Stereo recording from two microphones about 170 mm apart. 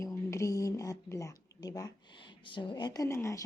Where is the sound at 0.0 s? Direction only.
15° left (ahead or behind).